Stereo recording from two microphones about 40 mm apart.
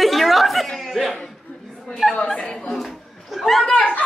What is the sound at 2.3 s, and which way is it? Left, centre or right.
Speech, left.